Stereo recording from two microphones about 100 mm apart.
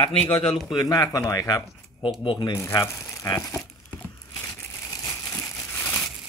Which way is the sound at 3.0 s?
30° left (ahead or behind).